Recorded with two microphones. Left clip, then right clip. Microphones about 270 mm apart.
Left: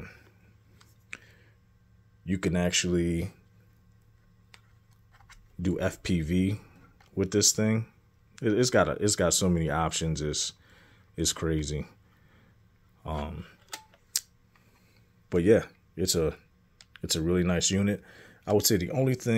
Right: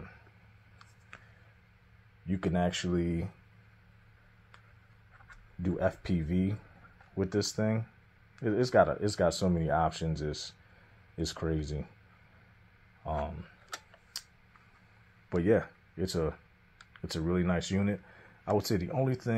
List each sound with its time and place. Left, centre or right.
1.1 s a sound: left
2.2 s speech: left
5.6 s speech: left
13.0 s speech: left
14.1 s tick-tock: left
15.2 s speech: left